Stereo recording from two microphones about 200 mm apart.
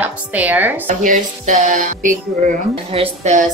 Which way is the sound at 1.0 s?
40° right (ahead or behind).